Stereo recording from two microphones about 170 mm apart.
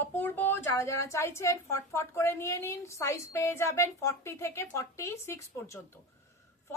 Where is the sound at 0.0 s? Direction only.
10° left (ahead or behind).